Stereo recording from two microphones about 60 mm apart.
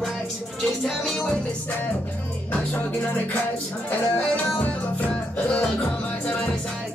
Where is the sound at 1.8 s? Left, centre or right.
Left.